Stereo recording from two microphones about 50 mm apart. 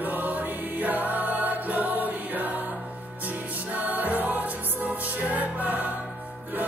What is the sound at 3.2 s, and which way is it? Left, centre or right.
Music, right.